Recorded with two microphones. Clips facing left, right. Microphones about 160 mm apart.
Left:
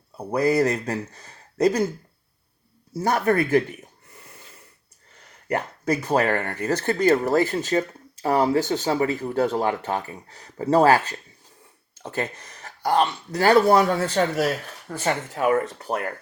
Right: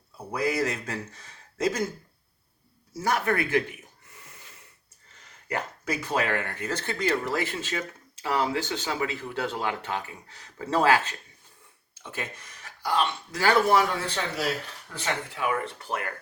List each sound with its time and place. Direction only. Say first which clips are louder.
0.3 s speech: left 7 dB; 35° left (ahead or behind)
3.1 s speech: left 5 dB; 35° left (ahead or behind)
5.5 s speech: left 7 dB; 35° left (ahead or behind)
14.8 s speech: left 7 dB; 45° left (ahead or behind)